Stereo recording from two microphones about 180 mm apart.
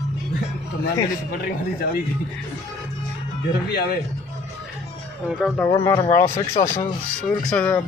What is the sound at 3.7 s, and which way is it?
Speech, 65° left (ahead or behind).